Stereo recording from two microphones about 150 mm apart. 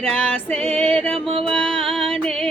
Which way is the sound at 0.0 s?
5° left (ahead or behind).